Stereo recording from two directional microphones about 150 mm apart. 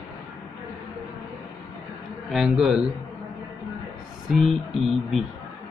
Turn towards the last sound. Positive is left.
turn(degrees=0)  # may be behind; listen again after turning